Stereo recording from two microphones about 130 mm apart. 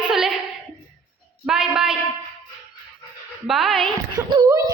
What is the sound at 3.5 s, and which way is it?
Speech, centre (ahead or behind).